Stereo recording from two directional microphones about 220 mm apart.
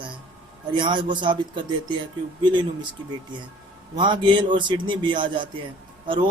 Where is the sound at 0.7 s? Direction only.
20° right (ahead or behind).